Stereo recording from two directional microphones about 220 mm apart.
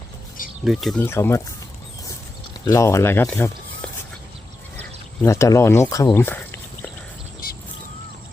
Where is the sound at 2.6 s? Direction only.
15° left (ahead or behind).